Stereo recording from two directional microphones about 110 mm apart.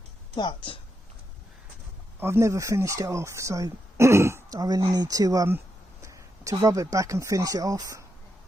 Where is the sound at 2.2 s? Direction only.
25° right (ahead or behind).